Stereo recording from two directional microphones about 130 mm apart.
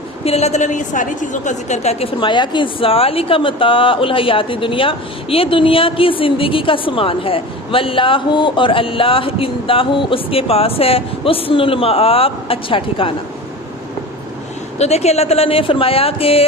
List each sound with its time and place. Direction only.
0.3 s a woman's voice: 55° left (ahead or behind)
14.8 s a woman's voice: 55° left (ahead or behind)